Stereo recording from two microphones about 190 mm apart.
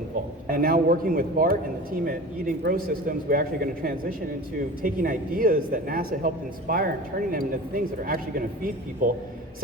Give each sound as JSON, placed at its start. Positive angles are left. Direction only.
{"t": 0.4, "sound": "speech", "side_deg": -50}
{"t": 2.6, "sound": "speech", "side_deg": -50}